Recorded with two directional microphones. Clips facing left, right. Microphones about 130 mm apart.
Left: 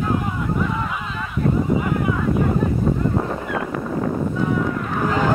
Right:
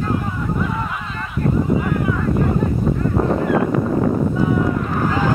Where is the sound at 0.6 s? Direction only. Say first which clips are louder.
Even; centre (ahead or behind).